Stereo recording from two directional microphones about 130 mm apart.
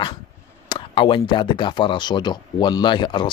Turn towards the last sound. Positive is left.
turn(degrees=40)  # may be behind; listen again after turning